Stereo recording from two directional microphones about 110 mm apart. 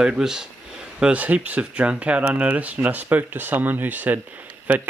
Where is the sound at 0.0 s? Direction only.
5° right (ahead or behind).